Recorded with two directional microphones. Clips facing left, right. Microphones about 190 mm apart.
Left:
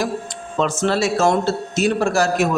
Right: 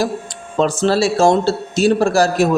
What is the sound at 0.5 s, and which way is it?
A man's voice, 35° right (ahead or behind).